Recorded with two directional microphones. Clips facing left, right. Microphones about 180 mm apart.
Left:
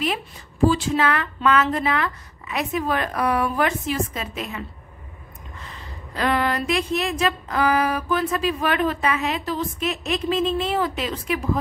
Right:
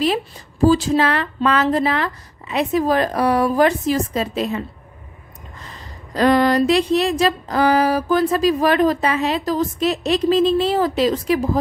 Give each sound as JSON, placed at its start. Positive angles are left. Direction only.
{"t": 0.7, "sound": "speech", "side_deg": -40}